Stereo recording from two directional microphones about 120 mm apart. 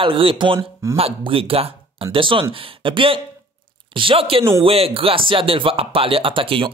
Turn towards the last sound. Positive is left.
turn(degrees=-45)  # may be behind; listen again after turning